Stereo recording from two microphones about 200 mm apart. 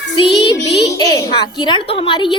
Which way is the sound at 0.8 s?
20° left (ahead or behind).